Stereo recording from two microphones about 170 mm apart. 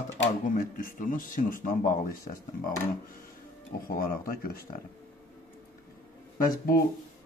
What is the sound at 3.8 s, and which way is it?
Speech, 55° left (ahead or behind).